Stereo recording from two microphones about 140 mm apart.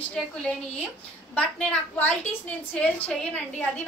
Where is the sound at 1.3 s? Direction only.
10° left (ahead or behind).